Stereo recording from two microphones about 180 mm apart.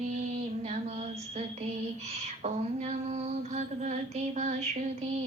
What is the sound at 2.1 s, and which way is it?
Female singing, 35° right (ahead or behind).